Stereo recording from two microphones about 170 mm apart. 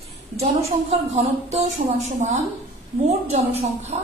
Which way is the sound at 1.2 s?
40° right (ahead or behind).